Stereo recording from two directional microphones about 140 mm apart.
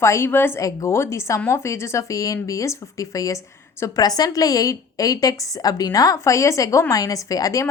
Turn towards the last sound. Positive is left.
turn(degrees=25)  # may be behind; listen again after turning